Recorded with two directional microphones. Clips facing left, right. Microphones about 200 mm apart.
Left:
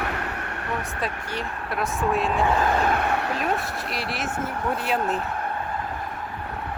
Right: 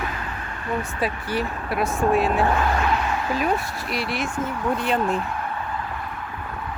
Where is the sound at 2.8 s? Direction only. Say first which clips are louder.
Even; 55° left (ahead or behind).